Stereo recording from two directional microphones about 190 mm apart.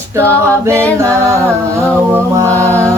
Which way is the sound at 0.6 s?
15° right (ahead or behind).